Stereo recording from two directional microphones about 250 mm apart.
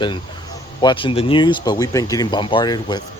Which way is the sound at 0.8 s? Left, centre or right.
Centre.